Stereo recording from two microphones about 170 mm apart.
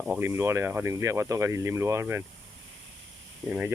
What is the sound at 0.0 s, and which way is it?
Speech, 10° right (ahead or behind).